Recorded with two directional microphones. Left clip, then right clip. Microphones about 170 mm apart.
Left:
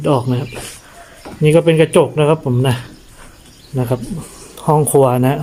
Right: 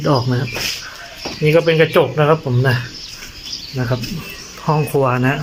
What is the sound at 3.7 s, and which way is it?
Speech, 25° left (ahead or behind).